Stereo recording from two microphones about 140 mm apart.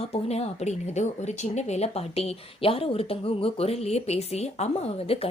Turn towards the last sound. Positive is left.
turn(degrees=45)  # may be behind; listen again after turning